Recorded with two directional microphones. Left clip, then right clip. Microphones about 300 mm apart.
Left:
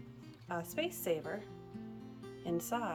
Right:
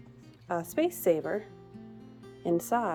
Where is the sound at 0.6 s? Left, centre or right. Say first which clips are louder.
Right 11 dB; centre.